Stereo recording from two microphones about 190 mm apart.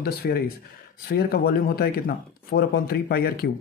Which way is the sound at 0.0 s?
55° left (ahead or behind).